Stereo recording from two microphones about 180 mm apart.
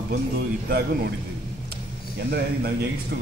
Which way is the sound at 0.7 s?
60° right (ahead or behind).